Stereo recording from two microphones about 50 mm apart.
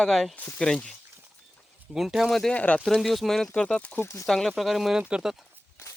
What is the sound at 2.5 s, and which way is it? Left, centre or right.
Speech, left.